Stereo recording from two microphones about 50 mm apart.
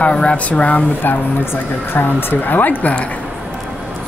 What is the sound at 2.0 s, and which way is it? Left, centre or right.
Speech, left.